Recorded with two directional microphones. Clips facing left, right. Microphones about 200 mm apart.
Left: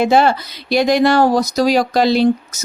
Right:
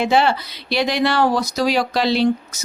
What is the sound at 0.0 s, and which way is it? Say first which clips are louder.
Speech: left 4 dB; 45° left (ahead or behind).